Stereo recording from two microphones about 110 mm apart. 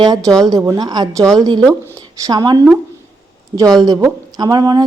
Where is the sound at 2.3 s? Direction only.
40° right (ahead or behind).